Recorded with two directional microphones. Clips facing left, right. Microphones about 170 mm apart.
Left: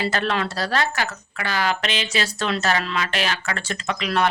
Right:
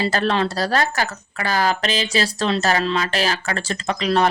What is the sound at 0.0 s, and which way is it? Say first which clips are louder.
A woman's voice: right 3 dB; 35° right (ahead or behind).